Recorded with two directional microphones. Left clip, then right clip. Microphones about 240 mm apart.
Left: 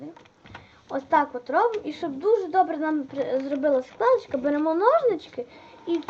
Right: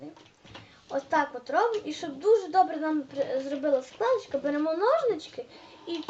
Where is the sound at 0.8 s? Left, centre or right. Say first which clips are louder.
Left 4 dB; left.